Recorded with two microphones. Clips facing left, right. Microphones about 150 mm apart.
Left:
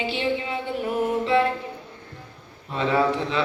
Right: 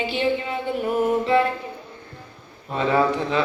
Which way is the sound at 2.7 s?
45° right (ahead or behind).